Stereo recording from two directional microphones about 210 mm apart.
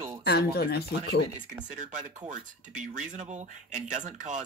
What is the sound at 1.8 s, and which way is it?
Speech, 35° right (ahead or behind).